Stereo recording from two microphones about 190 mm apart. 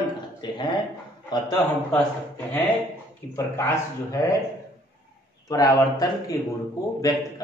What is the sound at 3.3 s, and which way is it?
A man's voice, 15° left (ahead or behind).